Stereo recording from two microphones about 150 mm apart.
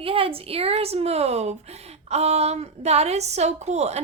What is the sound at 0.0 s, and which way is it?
A woman's voice, 40° right (ahead or behind).